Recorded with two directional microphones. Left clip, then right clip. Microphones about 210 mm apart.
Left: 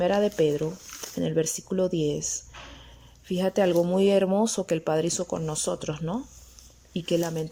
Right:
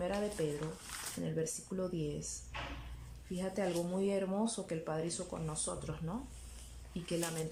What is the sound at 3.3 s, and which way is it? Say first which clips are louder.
Speech: left 14 dB; 40° left (ahead or behind).